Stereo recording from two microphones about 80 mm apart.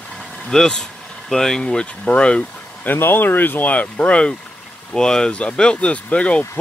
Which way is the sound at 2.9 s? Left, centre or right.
Left.